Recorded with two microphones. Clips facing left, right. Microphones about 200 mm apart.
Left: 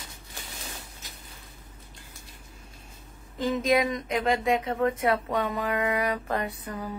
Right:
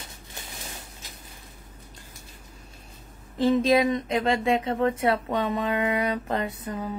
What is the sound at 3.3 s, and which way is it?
Speech, 30° right (ahead or behind).